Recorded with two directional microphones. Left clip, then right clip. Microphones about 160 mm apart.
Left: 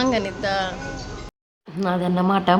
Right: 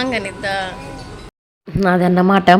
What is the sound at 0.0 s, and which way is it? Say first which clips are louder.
Speech: right 1 dB; 10° left (ahead or behind).